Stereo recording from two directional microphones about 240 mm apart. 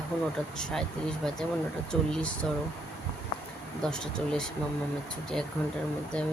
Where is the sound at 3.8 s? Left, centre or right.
Centre.